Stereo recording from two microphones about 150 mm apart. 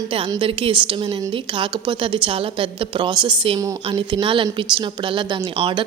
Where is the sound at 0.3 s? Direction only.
35° right (ahead or behind).